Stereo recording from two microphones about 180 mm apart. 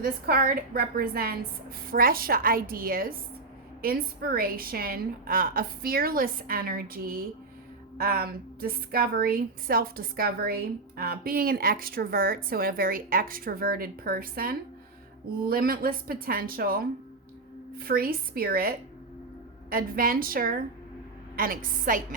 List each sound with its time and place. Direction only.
0.0 s a woman's voice: 55° right (ahead or behind)
19.7 s a woman's voice: 50° right (ahead or behind)